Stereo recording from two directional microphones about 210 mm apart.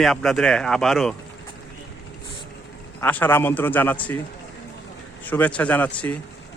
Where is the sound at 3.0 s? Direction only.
10° left (ahead or behind).